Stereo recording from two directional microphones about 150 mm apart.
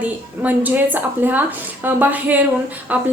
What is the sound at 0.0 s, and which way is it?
A woman's voice, 10° right (ahead or behind).